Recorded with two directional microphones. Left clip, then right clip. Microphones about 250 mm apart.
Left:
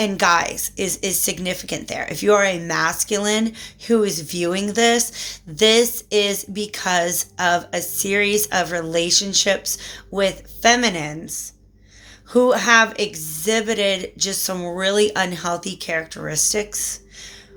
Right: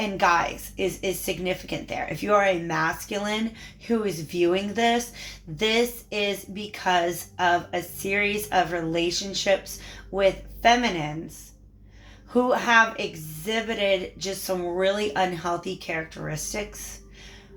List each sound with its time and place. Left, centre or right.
0.0 s speech: left
12.3 s speech: left